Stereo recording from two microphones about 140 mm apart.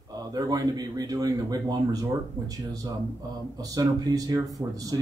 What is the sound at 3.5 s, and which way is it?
Speech, 25° right (ahead or behind).